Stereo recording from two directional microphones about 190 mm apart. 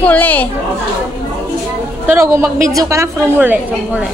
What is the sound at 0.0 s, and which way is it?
Speech, 10° left (ahead or behind).